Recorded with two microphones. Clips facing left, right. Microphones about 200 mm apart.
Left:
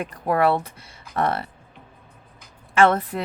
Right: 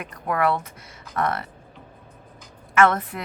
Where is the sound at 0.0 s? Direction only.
30° left (ahead or behind).